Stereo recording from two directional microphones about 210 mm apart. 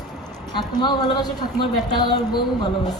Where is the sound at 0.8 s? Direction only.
20° left (ahead or behind).